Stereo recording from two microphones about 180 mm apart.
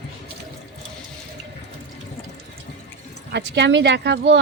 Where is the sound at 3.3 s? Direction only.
75° right (ahead or behind).